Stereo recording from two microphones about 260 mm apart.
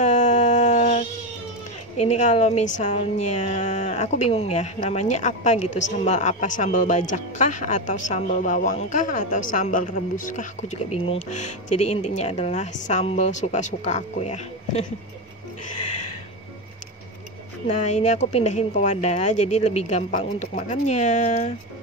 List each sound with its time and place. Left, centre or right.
0.0 s a sound: left
2.0 s speech: left
15.7 s music: left
17.6 s speech: left